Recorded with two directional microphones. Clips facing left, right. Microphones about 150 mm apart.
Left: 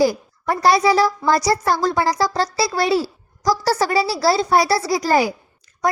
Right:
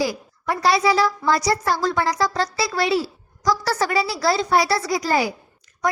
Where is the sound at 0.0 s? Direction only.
45° left (ahead or behind).